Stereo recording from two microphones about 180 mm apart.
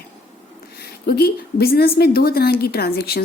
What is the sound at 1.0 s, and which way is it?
A woman's voice, 60° left (ahead or behind).